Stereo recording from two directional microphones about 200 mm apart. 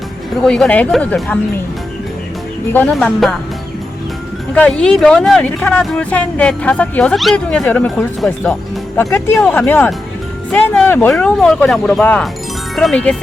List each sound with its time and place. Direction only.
0.4 s speech: 5° left (ahead or behind)
2.7 s speech: 5° left (ahead or behind)
4.5 s speech: 5° left (ahead or behind)